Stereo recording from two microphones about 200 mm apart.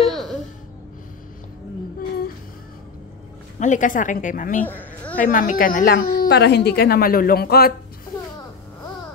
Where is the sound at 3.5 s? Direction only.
40° left (ahead or behind).